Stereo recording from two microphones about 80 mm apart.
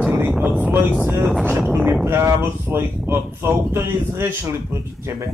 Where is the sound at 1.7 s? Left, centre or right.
Right.